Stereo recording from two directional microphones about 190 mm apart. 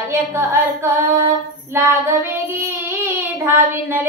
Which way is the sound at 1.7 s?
15° right (ahead or behind).